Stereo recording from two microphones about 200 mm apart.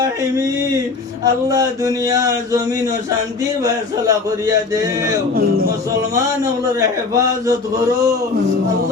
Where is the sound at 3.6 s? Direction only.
15° right (ahead or behind).